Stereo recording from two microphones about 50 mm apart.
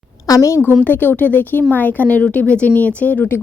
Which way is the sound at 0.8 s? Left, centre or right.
Left.